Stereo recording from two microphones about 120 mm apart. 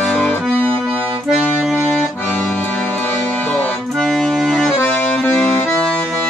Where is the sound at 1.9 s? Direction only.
15° left (ahead or behind).